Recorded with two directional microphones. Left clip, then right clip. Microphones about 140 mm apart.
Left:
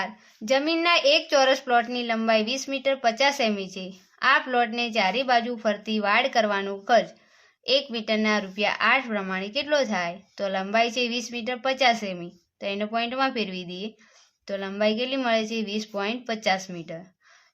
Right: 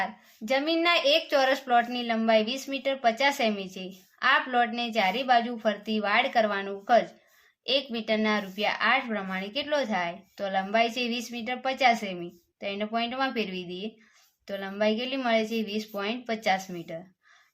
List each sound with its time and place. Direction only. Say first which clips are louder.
0.0 s speech: even; 40° left (ahead or behind)